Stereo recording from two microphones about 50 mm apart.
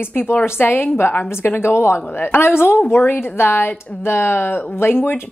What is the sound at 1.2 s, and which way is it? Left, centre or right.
Speech, left.